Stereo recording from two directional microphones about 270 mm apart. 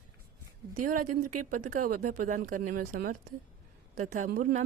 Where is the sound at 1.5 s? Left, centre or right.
Right.